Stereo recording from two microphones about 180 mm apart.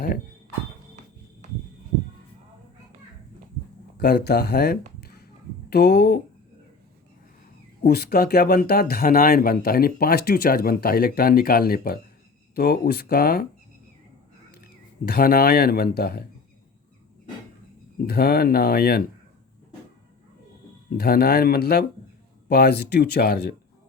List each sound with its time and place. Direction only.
3.9 s speech: 60° left (ahead or behind)
4.9 s a sound: 60° left (ahead or behind)
5.7 s speech: 60° left (ahead or behind)
7.9 s speech: 60° left (ahead or behind)
14.5 s speech: 60° left (ahead or behind)
18.0 s speech: 55° left (ahead or behind)
21.0 s speech: 60° left (ahead or behind)